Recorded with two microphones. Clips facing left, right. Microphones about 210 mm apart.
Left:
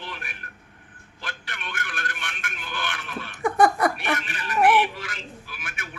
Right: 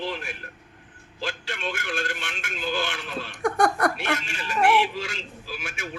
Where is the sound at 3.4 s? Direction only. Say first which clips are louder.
Left 2 dB; centre (ahead or behind).